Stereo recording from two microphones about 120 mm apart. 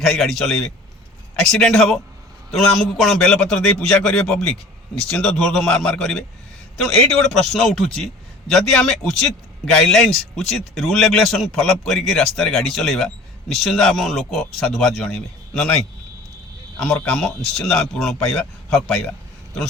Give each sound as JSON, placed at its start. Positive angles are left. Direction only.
{"t": 0.0, "sound": "a man's voice", "side_deg": 5}
{"t": 16.7, "sound": "a man's voice", "side_deg": 5}